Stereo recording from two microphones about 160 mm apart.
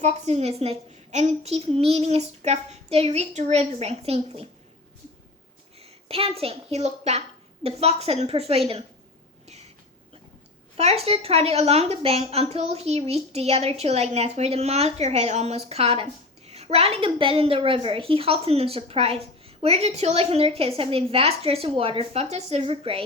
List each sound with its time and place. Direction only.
0.0 s a woman's voice: 45° right (ahead or behind)
5.8 s a woman's voice: 35° right (ahead or behind)
10.8 s a woman's voice: 40° right (ahead or behind)